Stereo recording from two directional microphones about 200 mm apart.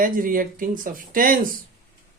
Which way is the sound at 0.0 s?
45° right (ahead or behind).